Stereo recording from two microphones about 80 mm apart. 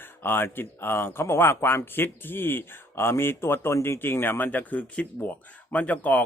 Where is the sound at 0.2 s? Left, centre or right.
Left.